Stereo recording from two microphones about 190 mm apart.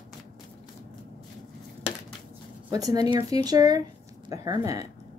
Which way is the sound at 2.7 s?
20° right (ahead or behind).